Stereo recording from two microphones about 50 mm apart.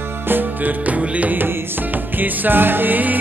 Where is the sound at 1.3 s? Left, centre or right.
Right.